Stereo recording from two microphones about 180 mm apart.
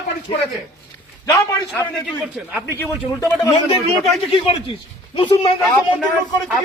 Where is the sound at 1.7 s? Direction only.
5° left (ahead or behind).